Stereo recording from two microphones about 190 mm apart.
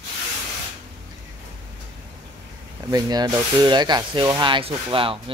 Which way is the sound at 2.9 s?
20° right (ahead or behind).